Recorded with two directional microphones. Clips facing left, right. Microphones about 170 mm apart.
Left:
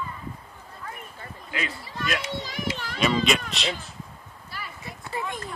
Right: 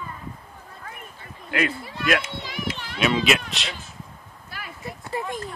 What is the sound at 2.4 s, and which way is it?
Children playing, 45° left (ahead or behind).